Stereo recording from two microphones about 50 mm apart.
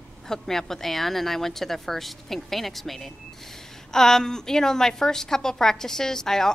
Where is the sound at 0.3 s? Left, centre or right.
Centre.